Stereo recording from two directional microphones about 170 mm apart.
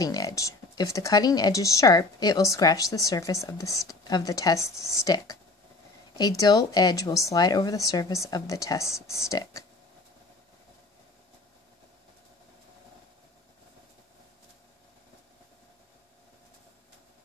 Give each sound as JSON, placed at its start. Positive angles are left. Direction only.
{"t": 0.0, "sound": "a woman's voice", "side_deg": 20}